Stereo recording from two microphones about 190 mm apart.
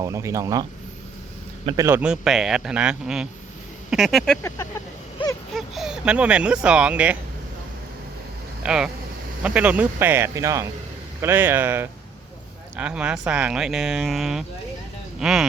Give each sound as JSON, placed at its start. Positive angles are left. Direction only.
{"t": 0.0, "sound": "speech", "side_deg": -15}
{"t": 4.4, "sound": "speech", "side_deg": 15}
{"t": 5.5, "sound": "speech", "side_deg": 0}
{"t": 8.6, "sound": "speech", "side_deg": -5}